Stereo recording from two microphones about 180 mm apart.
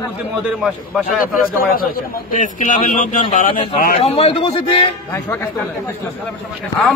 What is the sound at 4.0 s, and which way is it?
Speech, 35° left (ahead or behind).